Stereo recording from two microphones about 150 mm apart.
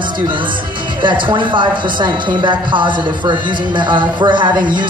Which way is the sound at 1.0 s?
30° right (ahead or behind).